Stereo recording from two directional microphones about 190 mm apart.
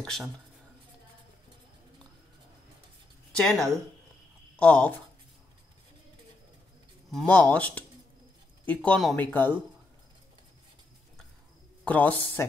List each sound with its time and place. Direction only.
0.0 s speech: centre (ahead or behind)
3.3 s speech: 5° left (ahead or behind)
7.1 s speech: 5° left (ahead or behind)
11.8 s speech: 10° left (ahead or behind)